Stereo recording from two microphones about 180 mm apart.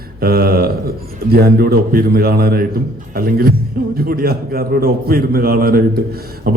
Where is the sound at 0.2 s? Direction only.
60° right (ahead or behind).